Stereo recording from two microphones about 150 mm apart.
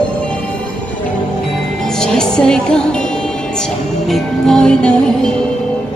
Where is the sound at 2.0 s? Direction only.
5° left (ahead or behind).